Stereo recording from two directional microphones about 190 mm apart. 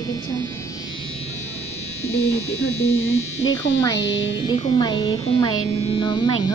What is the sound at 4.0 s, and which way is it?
Speech, 75° left (ahead or behind).